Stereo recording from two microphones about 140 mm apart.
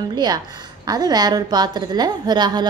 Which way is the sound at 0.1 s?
30° right (ahead or behind).